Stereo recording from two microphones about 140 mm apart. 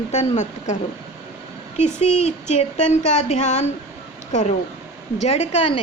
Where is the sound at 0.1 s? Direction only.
50° left (ahead or behind).